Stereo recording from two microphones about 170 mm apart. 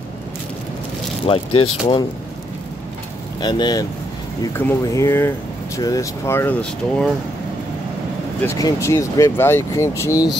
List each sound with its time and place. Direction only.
1.2 s speech: 35° left (ahead or behind)
3.3 s speech: 25° left (ahead or behind); by 7.1 s 10° left (ahead or behind)
8.5 s speech: 20° left (ahead or behind)